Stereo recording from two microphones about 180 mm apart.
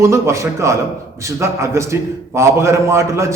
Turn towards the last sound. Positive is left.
turn(degrees=-15)  # may be behind; listen again after turning